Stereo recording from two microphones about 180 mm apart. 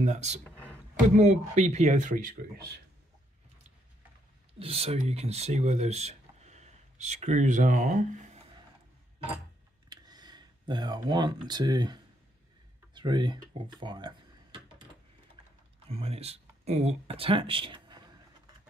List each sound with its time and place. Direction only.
0.0 s speech: 40° right (ahead or behind)
4.6 s speech: 35° right (ahead or behind)
9.8 s speech: 25° right (ahead or behind)
12.9 s a sound: 25° right (ahead or behind)
15.9 s speech: 35° right (ahead or behind)